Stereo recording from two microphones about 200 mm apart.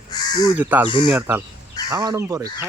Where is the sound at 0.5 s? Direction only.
10° right (ahead or behind).